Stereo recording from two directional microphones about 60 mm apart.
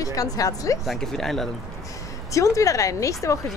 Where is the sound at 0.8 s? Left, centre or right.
Centre.